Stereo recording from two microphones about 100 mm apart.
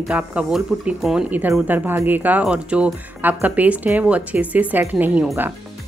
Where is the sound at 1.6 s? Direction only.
20° right (ahead or behind).